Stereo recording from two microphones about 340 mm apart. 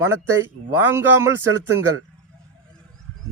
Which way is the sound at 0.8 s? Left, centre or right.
Centre.